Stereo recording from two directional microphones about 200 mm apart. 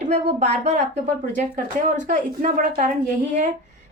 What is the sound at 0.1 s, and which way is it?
A woman's voice, 35° right (ahead or behind).